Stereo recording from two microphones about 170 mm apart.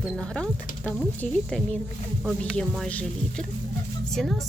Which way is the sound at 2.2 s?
5° right (ahead or behind).